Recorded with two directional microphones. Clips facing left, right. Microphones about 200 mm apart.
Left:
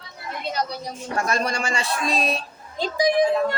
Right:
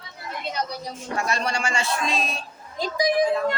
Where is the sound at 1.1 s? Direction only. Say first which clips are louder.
Left 2 dB; 45° left (ahead or behind); by 3.5 s 30° left (ahead or behind).